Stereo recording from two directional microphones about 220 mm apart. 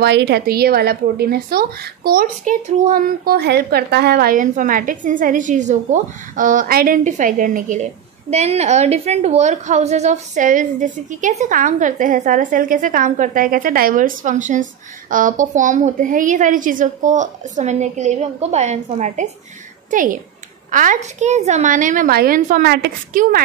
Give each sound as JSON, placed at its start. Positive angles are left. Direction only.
{"t": 0.0, "sound": "a woman's voice", "side_deg": -50}